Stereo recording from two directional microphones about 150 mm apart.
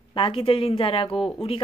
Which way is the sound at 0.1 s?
40° left (ahead or behind).